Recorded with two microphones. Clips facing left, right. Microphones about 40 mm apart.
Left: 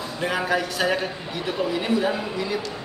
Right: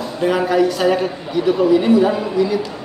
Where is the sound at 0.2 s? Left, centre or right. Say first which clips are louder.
Right 8 dB; centre.